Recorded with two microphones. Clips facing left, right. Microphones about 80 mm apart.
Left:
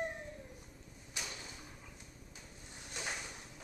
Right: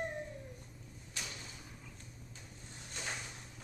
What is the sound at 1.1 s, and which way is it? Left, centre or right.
Drawer open or close, centre.